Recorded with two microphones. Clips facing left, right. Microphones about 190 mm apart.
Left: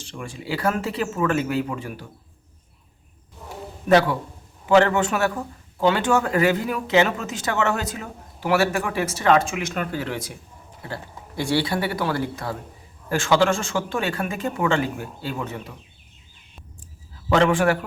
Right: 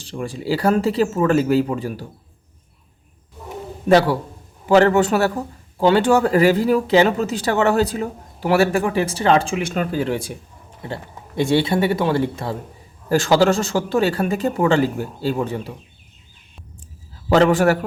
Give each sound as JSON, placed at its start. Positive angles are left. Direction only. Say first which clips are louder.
{"t": 0.0, "sound": "speech", "louder": "right 7 dB", "side_deg": -35}
{"t": 3.8, "sound": "speech", "louder": "right 3 dB", "side_deg": -30}
{"t": 13.1, "sound": "speech", "louder": "right 4 dB", "side_deg": -35}
{"t": 17.2, "sound": "speech", "louder": "right 4 dB", "side_deg": -35}